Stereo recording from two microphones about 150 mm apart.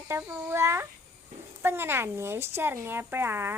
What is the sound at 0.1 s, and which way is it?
Speech, 15° right (ahead or behind).